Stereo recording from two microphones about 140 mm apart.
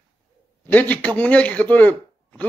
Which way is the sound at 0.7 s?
10° left (ahead or behind).